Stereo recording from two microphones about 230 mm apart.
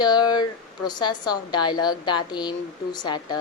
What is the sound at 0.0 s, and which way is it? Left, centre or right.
A woman's voice, centre.